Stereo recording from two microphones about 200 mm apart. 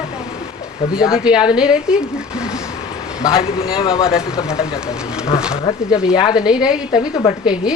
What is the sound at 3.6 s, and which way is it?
Speech, 25° left (ahead or behind).